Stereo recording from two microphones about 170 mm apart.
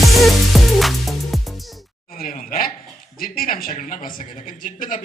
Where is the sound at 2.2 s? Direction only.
55° left (ahead or behind).